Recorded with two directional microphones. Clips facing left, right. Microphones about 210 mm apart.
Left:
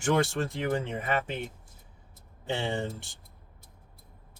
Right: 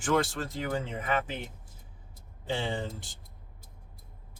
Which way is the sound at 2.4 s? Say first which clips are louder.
Left 1 dB; 25° left (ahead or behind).